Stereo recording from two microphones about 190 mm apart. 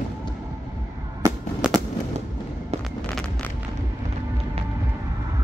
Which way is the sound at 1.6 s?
5° right (ahead or behind).